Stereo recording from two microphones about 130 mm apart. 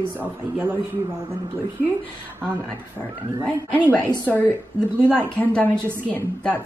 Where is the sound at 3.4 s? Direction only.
15° right (ahead or behind).